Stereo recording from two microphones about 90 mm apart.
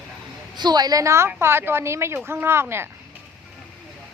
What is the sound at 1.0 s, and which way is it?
A woman's voice, 30° right (ahead or behind).